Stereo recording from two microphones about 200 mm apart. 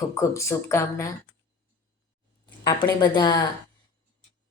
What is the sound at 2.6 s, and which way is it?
Speech, 20° left (ahead or behind).